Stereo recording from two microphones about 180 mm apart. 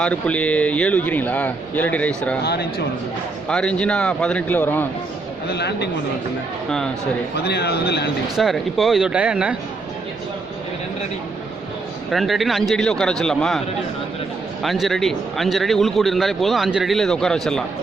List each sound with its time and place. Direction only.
0.0 s speech: 5° left (ahead or behind)
2.4 s a man's voice: 65° left (ahead or behind)
3.5 s a man's voice: 5° left (ahead or behind)
5.5 s a woman's voice: 70° left (ahead or behind)
6.7 s a man's voice: 5° left (ahead or behind)
7.4 s a man's voice: 65° left (ahead or behind)
8.4 s a man's voice: centre (ahead or behind)
12.1 s a man's voice: centre (ahead or behind)
14.6 s a man's voice: centre (ahead or behind)